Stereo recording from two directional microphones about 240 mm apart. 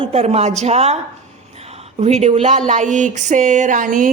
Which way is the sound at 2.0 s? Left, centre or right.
Right.